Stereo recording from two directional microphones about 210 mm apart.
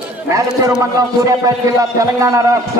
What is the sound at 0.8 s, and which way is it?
A man's voice, 15° right (ahead or behind).